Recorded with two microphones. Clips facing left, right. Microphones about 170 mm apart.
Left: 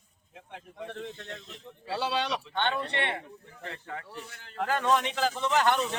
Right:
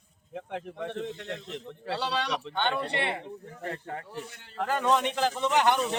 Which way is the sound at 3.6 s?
45° right (ahead or behind).